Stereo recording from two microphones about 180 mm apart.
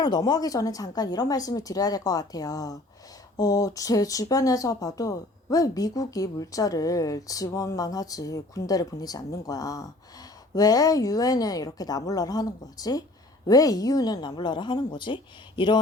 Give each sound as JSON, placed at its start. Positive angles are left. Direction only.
{"t": 0.0, "sound": "speech", "side_deg": 20}